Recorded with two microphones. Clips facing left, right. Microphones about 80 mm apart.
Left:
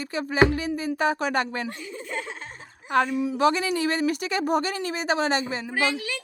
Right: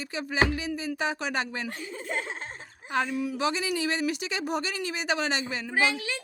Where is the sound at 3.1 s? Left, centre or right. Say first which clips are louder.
Left 4 dB; left.